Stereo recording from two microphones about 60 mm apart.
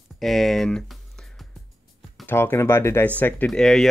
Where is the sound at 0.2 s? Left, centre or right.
Centre.